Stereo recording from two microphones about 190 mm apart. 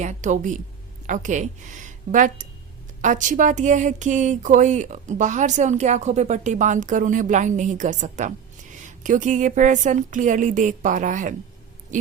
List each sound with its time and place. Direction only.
0.0 s speech: 40° right (ahead or behind)